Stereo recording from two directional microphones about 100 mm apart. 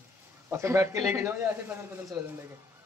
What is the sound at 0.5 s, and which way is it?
A woman's voice, 25° right (ahead or behind).